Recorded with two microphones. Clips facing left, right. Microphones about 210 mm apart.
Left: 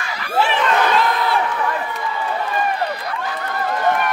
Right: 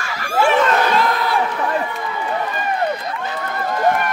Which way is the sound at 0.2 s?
45° right (ahead or behind).